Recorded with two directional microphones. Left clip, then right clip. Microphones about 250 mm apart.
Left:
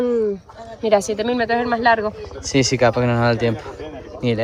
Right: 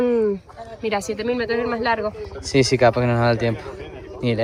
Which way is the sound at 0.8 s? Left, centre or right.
Left.